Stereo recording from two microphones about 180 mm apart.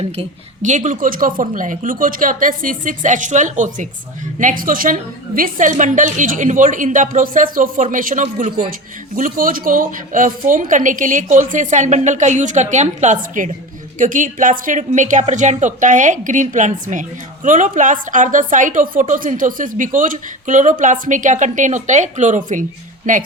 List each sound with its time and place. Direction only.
0.2 s a woman's voice: 40° right (ahead or behind)